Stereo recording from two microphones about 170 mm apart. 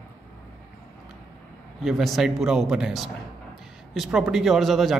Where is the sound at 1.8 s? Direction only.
Centre (ahead or behind).